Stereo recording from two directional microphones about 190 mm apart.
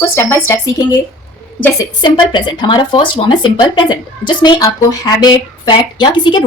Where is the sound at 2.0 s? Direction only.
25° left (ahead or behind).